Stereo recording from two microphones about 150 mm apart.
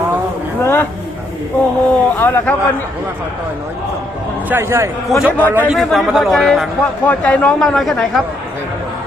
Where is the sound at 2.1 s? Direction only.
15° left (ahead or behind).